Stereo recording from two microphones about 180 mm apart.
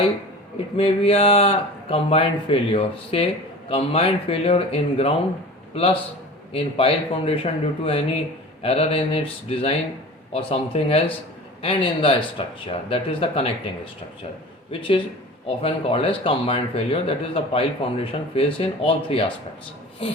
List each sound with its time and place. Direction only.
0.8 s speech: 30° left (ahead or behind)
14.7 s speech: 30° left (ahead or behind)